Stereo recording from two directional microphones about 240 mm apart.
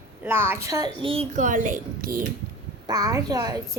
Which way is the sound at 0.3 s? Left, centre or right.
Centre.